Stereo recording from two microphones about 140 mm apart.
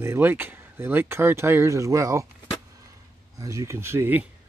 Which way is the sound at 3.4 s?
20° right (ahead or behind).